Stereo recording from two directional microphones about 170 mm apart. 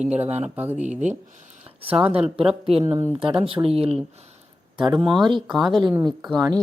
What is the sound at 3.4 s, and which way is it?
Speech, 30° right (ahead or behind).